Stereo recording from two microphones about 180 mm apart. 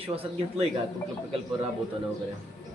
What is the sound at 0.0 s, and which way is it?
Speech, 30° right (ahead or behind).